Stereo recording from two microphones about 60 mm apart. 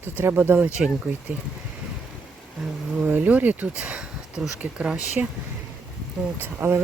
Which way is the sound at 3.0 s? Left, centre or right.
Right.